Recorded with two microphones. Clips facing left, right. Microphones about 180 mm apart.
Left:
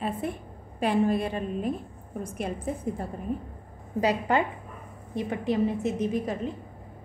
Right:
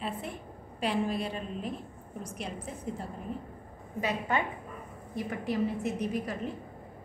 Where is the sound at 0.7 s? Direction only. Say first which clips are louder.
Left 6 dB; 55° left (ahead or behind).